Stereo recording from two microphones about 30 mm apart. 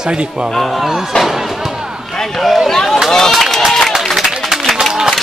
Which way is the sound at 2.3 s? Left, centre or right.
Centre.